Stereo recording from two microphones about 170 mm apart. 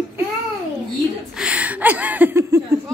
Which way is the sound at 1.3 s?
5° right (ahead or behind).